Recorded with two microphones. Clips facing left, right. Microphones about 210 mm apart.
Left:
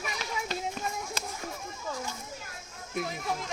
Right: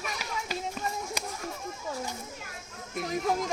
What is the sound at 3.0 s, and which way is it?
Chatter, 45° right (ahead or behind).